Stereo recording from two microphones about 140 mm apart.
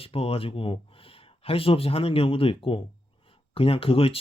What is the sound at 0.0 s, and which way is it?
Speech, 45° left (ahead or behind).